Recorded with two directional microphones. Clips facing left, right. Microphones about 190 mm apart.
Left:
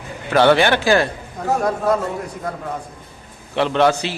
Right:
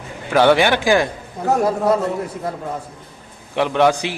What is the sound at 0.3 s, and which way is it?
Speech, 10° right (ahead or behind).